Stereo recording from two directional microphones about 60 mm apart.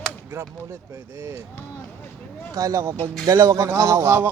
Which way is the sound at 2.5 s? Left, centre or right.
Right.